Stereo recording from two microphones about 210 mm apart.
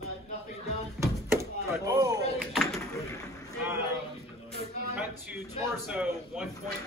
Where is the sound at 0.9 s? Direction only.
15° right (ahead or behind).